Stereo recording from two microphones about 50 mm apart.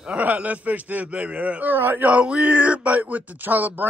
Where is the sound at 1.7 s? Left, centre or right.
Right.